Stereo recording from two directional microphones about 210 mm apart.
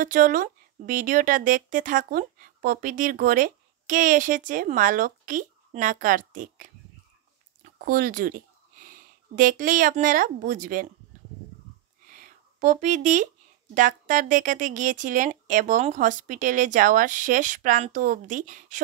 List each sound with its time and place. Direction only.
0.0 s speech: 40° right (ahead or behind)
12.1 s a sound: 35° right (ahead or behind)
13.7 s speech: 40° right (ahead or behind)